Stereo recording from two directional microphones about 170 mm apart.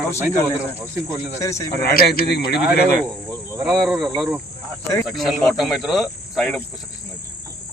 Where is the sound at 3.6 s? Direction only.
5° right (ahead or behind).